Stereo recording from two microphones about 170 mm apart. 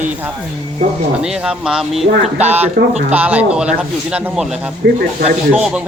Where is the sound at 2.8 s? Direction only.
70° right (ahead or behind).